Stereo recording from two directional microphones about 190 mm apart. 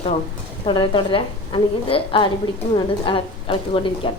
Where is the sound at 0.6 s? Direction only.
25° left (ahead or behind).